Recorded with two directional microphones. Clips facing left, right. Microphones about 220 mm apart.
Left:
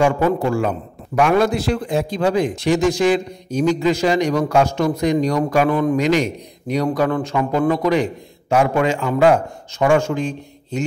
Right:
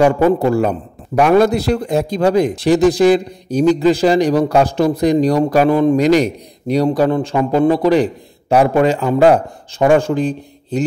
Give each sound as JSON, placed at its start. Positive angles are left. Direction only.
{"t": 0.0, "sound": "a man's voice", "side_deg": -35}